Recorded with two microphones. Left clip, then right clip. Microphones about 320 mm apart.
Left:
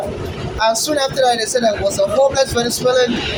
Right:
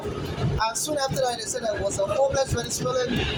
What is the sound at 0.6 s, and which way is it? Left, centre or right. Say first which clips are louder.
A man's voice: left 10 dB; right.